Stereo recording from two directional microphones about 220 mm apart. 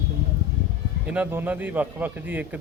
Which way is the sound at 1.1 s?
5° right (ahead or behind).